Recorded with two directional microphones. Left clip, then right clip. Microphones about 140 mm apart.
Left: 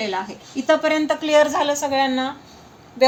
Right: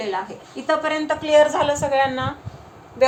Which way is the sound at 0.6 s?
65° left (ahead or behind).